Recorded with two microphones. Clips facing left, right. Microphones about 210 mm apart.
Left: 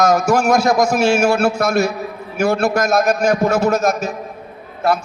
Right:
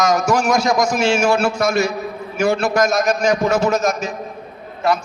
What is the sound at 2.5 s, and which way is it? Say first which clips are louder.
A man's voice: left 2 dB; 55° left (ahead or behind).